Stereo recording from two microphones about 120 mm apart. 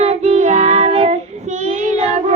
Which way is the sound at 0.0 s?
60° right (ahead or behind).